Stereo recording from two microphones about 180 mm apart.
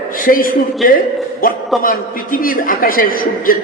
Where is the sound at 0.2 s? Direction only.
50° left (ahead or behind).